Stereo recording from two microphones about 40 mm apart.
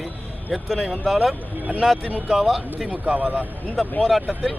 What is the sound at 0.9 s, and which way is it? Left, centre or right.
Speech, centre.